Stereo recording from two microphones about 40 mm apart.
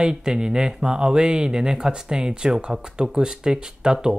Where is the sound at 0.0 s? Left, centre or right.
Centre.